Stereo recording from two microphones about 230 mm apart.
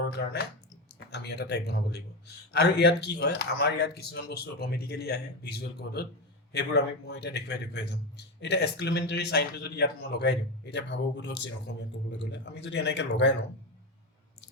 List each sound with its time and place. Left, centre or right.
0.9 s speech: left